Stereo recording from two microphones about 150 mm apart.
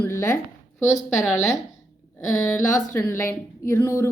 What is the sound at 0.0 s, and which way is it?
Speech, 15° left (ahead or behind).